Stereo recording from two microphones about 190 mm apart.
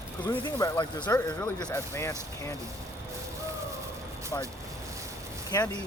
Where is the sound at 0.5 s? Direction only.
20° left (ahead or behind).